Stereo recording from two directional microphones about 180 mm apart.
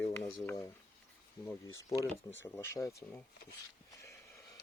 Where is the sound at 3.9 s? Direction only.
15° left (ahead or behind).